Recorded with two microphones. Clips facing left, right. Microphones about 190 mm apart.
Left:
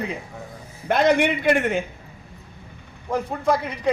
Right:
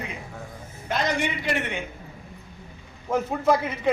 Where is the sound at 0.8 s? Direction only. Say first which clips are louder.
Left 8 dB; 55° left (ahead or behind).